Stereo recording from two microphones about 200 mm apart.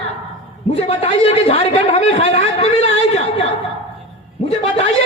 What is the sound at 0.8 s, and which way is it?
A man's voice, 30° left (ahead or behind).